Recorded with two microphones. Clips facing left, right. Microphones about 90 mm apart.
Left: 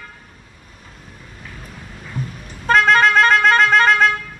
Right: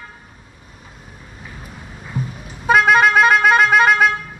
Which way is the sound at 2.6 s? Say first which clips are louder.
Right 1 dB; 10° right (ahead or behind).